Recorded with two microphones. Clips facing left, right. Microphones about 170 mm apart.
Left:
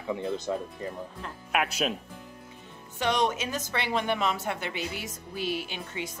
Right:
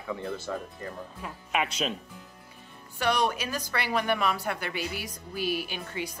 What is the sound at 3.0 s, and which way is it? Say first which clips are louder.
Speech: even; 20° left (ahead or behind).